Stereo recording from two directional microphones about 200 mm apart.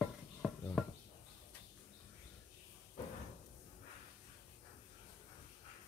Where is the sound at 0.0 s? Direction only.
Centre (ahead or behind).